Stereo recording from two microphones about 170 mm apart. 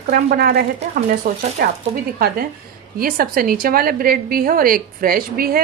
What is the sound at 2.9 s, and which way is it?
A woman's voice, 60° right (ahead or behind).